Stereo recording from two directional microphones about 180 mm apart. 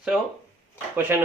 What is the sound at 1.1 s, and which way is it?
Speech, 15° right (ahead or behind).